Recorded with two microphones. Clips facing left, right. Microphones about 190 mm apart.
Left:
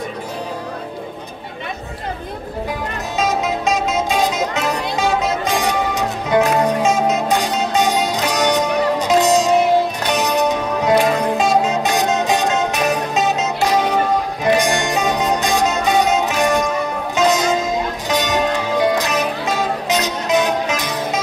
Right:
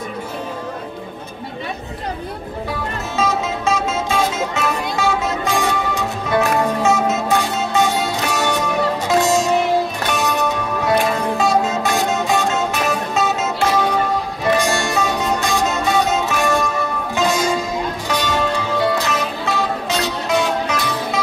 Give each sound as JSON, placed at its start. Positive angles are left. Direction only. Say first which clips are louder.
{"t": 3.2, "sound": "music", "louder": "left 1 dB", "side_deg": 15}